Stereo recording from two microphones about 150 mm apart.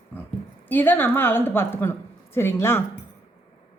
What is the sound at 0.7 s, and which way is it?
A woman's voice, 15° left (ahead or behind).